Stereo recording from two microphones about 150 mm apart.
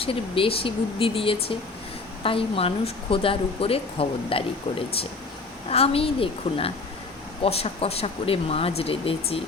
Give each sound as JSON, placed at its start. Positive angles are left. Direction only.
{"t": 0.0, "sound": "speech", "side_deg": 40}
{"t": 5.6, "sound": "speech", "side_deg": 40}